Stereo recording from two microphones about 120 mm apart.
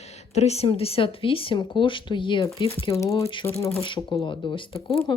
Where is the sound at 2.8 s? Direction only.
25° left (ahead or behind).